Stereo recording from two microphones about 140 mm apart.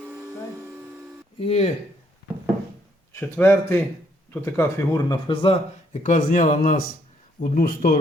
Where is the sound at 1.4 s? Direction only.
50° left (ahead or behind).